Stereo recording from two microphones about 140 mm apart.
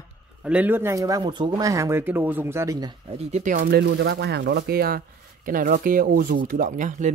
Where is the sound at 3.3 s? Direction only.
70° right (ahead or behind).